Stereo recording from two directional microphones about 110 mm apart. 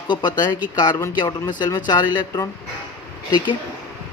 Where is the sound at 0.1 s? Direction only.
45° left (ahead or behind).